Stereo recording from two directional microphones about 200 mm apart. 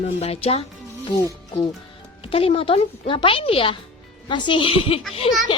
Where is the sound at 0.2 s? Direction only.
30° left (ahead or behind).